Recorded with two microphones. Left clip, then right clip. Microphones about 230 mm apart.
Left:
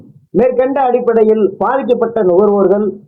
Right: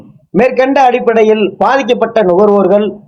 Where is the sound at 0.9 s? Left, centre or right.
Centre.